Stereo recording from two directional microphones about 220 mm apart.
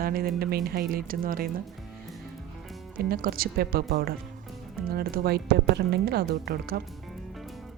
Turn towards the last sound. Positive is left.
turn(degrees=-45)  # may be behind; listen again after turning